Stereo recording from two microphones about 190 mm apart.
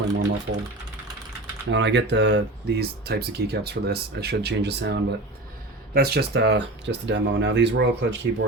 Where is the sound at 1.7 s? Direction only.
70° right (ahead or behind).